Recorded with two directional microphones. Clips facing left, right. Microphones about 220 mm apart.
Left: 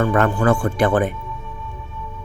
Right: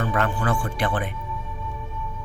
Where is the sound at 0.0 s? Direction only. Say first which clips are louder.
Left 7 dB; 45° left (ahead or behind).